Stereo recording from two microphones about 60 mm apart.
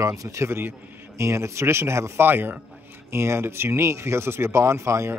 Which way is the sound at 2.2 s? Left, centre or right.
Right.